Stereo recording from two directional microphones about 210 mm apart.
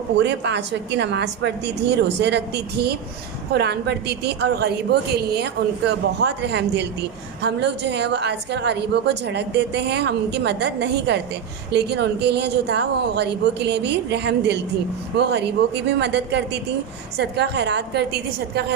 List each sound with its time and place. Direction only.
0.2 s a woman's voice: 55° right (ahead or behind)